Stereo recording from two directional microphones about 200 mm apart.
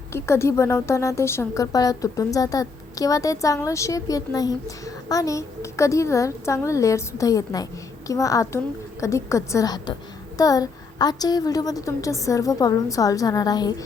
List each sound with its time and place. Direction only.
0.1 s a woman's voice: 15° left (ahead or behind)